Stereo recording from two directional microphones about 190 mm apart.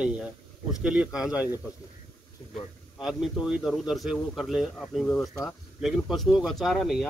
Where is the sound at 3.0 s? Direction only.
Centre (ahead or behind).